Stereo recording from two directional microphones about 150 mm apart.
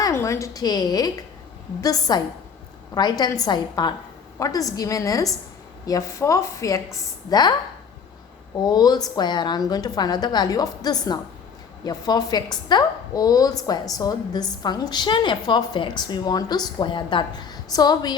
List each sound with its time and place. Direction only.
0.0 s a woman's voice: 20° left (ahead or behind)
8.6 s a woman's voice: 25° left (ahead or behind)